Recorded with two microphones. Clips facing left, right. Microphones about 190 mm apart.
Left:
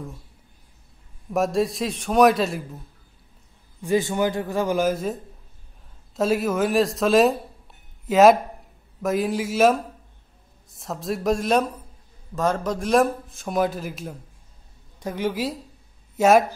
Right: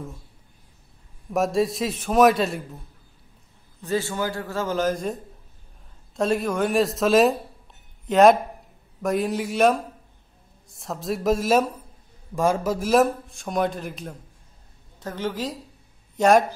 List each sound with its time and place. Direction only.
1.3 s a man's voice: centre (ahead or behind)
3.8 s a man's voice: 15° left (ahead or behind)
15.0 s a man's voice: 15° left (ahead or behind)